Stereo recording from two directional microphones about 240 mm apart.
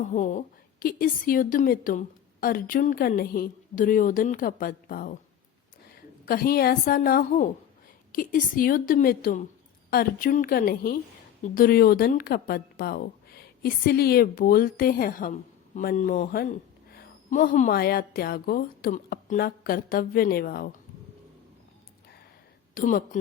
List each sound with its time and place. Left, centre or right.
0.1 s a woman's voice: left
6.2 s a woman's voice: left
22.7 s speech: left